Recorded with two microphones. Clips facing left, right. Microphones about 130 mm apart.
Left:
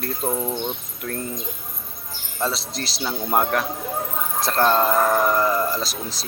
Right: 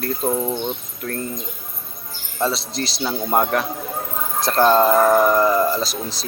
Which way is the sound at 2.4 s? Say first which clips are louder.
Right 4 dB; centre (ahead or behind).